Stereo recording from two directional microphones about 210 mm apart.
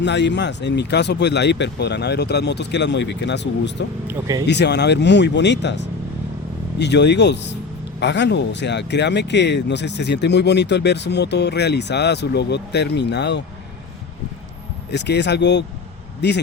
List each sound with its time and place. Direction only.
0.0 s speech: 55° left (ahead or behind)
4.0 s speech: 15° right (ahead or behind)
4.4 s speech: 55° left (ahead or behind)
6.7 s speech: 55° left (ahead or behind)
14.8 s speech: 55° left (ahead or behind)